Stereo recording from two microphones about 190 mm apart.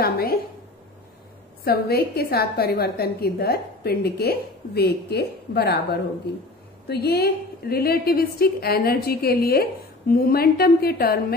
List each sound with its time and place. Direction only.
0.0 s a woman's voice: 55° left (ahead or behind)
1.6 s a woman's voice: 55° left (ahead or behind)